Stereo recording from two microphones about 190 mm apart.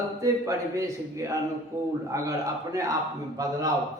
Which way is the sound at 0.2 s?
15° right (ahead or behind).